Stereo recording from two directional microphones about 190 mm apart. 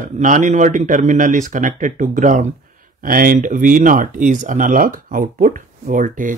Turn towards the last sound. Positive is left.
turn(degrees=-45)  # may be behind; listen again after turning